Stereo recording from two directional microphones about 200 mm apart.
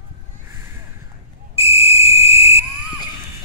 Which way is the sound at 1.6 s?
30° left (ahead or behind).